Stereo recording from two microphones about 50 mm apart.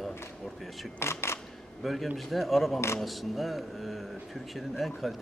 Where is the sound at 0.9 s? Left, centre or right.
Left.